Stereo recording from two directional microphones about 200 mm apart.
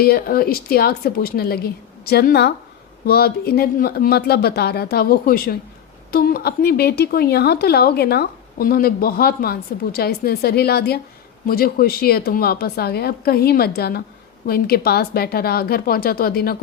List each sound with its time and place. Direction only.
0.0 s speech: 50° left (ahead or behind)